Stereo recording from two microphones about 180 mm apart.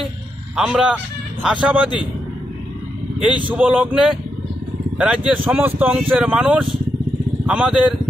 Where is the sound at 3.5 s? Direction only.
10° right (ahead or behind).